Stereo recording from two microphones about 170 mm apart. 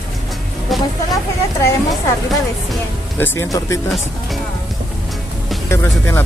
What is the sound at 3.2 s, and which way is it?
Speech, 15° left (ahead or behind).